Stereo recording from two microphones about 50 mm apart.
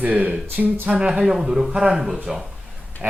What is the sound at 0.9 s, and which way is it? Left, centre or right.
Speech, centre.